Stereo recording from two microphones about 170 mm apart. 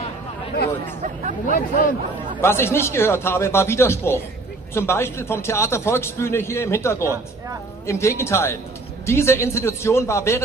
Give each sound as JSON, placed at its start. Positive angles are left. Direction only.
{"t": 1.5, "sound": "speech", "side_deg": 50}
{"t": 2.4, "sound": "a man's voice", "side_deg": 15}